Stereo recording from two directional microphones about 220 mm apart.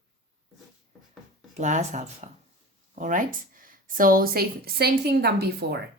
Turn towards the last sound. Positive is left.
turn(degrees=-45)  # may be behind; listen again after turning